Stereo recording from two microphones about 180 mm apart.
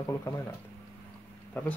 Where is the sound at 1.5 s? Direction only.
10° left (ahead or behind).